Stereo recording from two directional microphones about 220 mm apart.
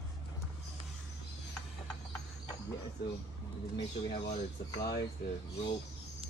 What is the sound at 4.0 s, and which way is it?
Speech, 25° left (ahead or behind).